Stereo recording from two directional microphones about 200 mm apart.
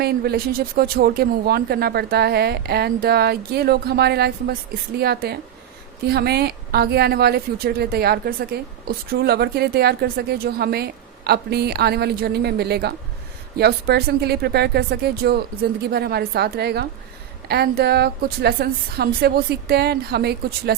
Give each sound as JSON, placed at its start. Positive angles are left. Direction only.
{"t": 0.0, "sound": "speech", "side_deg": -50}